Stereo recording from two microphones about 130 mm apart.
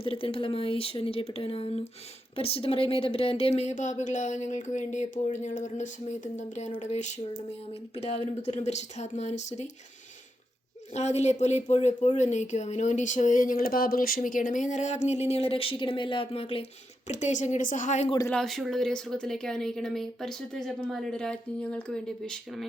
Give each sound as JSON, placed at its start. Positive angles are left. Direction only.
{"t": 0.0, "sound": "speech", "side_deg": 45}
{"t": 10.9, "sound": "speech", "side_deg": 60}
{"t": 17.1, "sound": "a woman's voice", "side_deg": 65}
{"t": 18.3, "sound": "a woman's voice", "side_deg": 5}